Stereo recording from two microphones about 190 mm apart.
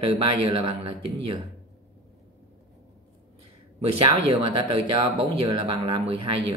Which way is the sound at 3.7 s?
25° right (ahead or behind).